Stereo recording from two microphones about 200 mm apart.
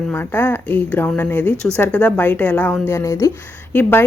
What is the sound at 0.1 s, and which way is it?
A woman's voice, 10° left (ahead or behind).